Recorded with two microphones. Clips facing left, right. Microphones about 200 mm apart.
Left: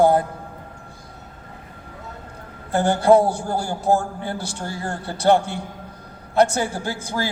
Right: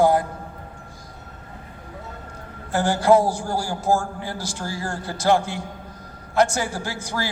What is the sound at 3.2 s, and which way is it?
A man's voice, 60° left (ahead or behind).